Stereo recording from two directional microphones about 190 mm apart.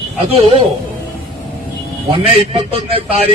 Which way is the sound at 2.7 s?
30° right (ahead or behind).